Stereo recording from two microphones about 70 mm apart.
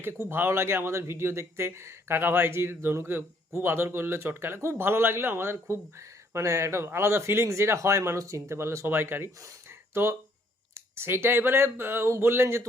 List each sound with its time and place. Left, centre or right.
0.0 s speech: right
9.6 s a sound: right
10.8 s speech: right